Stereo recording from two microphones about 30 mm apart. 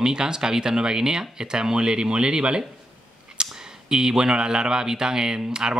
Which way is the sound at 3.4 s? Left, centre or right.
Right.